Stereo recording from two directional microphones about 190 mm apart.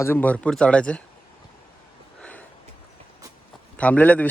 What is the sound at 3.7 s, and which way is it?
Speech, 10° left (ahead or behind).